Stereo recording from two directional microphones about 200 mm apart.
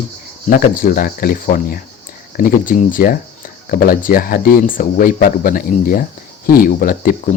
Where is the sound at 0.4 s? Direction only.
45° left (ahead or behind).